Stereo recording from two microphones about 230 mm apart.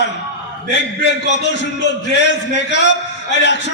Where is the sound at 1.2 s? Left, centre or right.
Left.